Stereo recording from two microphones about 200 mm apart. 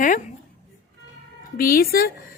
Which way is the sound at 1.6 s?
45° left (ahead or behind).